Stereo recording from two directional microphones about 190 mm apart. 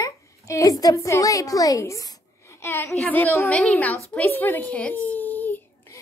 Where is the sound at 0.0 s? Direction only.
15° left (ahead or behind).